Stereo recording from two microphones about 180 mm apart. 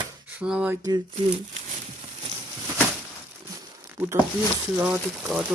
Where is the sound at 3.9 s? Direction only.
10° right (ahead or behind).